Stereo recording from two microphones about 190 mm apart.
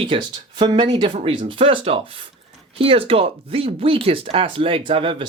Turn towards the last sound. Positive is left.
turn(degrees=-25)  # may be behind; listen again after turning